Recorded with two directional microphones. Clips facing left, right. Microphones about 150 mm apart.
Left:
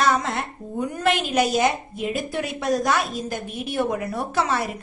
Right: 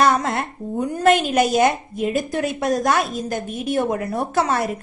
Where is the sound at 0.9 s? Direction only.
45° right (ahead or behind).